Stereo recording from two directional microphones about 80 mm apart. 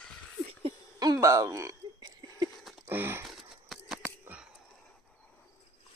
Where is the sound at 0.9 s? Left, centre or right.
Right.